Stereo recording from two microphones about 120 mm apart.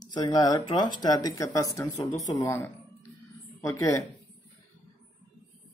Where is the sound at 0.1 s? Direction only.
35° left (ahead or behind).